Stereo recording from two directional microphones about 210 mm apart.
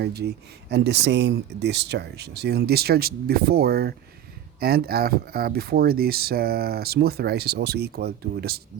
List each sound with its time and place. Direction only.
0.0 s speech: 50° right (ahead or behind)